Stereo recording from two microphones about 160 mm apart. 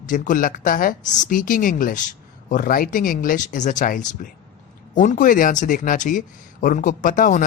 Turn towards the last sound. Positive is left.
turn(degrees=55)  # may be behind; listen again after turning